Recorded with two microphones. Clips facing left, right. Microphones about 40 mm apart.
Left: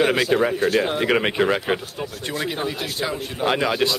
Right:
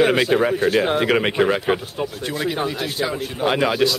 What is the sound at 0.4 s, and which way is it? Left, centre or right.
Speech, centre.